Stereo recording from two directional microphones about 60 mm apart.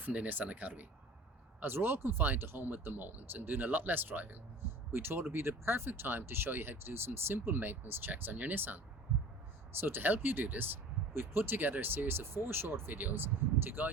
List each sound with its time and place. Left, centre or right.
0.0 s speech: right